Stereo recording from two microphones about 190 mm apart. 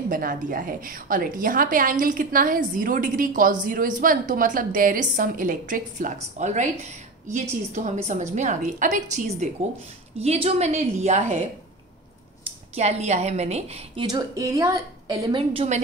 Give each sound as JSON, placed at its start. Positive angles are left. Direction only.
{"t": 0.1, "sound": "a woman's voice", "side_deg": -45}
{"t": 12.7, "sound": "a woman's voice", "side_deg": -35}